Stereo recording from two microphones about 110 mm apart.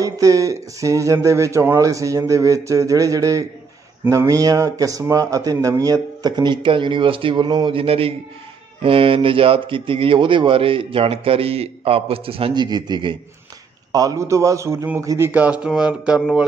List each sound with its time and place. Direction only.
0.0 s speech: 30° right (ahead or behind); by 12.6 s 60° right (ahead or behind)
12.6 s speech: 40° right (ahead or behind)
13.9 s speech: 30° right (ahead or behind)
15.4 s speech: 10° right (ahead or behind)